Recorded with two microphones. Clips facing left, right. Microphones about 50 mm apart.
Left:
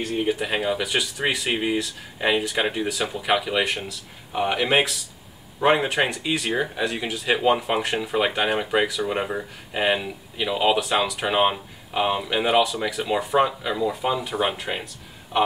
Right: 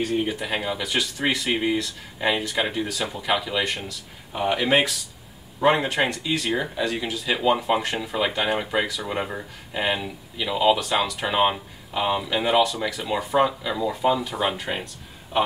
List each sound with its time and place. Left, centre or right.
0.3 s speech: centre
4.6 s speech: centre